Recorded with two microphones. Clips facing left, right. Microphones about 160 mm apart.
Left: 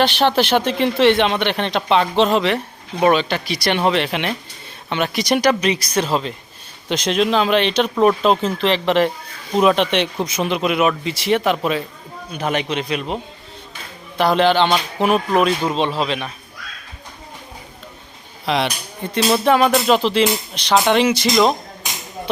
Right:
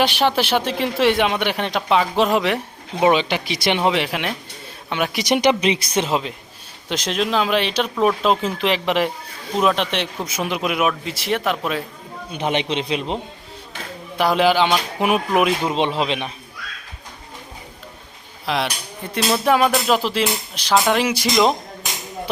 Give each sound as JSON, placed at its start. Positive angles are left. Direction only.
{"t": 0.0, "sound": "speech", "side_deg": -10}
{"t": 6.8, "sound": "speech", "side_deg": 0}
{"t": 12.3, "sound": "speech", "side_deg": -25}
{"t": 14.2, "sound": "speech", "side_deg": -5}
{"t": 18.4, "sound": "speech", "side_deg": 0}